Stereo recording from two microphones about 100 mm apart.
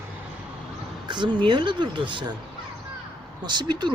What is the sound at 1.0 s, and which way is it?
Speech, 50° right (ahead or behind).